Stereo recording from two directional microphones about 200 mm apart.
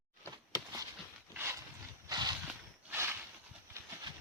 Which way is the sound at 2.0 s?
20° right (ahead or behind).